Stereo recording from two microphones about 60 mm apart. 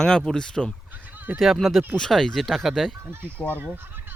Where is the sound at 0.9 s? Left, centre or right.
Right.